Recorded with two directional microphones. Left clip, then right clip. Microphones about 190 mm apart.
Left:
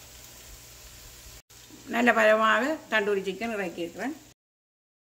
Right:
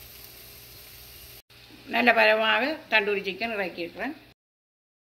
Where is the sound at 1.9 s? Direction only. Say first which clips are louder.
Right 1 dB; 40° left (ahead or behind).